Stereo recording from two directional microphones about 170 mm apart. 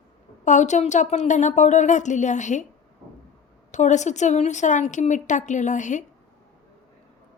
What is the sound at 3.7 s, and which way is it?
A woman's voice, 45° left (ahead or behind).